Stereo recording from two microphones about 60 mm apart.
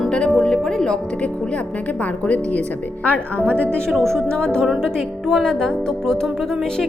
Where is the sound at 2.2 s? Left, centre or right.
Left.